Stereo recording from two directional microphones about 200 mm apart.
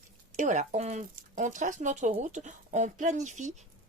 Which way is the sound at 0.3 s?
35° right (ahead or behind).